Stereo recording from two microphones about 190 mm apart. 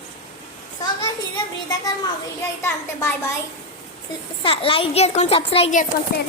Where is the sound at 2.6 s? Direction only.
15° left (ahead or behind).